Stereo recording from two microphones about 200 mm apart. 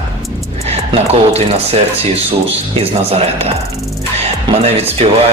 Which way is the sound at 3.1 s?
30° right (ahead or behind).